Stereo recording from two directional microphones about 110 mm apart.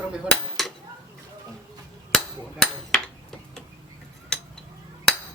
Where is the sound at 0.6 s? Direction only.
5° left (ahead or behind).